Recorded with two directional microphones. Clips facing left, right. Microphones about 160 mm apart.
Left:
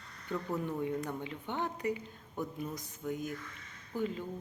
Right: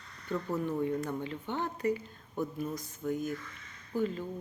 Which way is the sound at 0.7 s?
15° left (ahead or behind).